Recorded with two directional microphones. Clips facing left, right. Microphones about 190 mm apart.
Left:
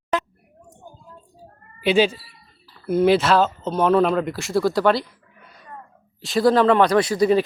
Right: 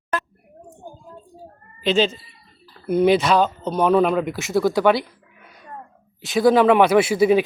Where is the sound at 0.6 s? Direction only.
45° right (ahead or behind).